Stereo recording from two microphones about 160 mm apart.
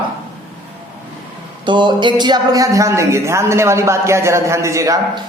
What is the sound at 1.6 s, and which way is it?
Speech, 30° right (ahead or behind).